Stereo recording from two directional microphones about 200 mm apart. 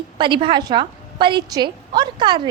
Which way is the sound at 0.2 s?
25° right (ahead or behind).